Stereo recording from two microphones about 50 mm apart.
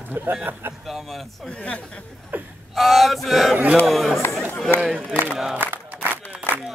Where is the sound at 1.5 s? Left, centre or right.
Left.